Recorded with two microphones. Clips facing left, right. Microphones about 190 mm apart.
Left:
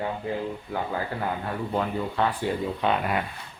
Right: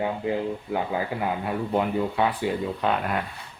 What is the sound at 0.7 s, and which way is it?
Speech, 15° right (ahead or behind).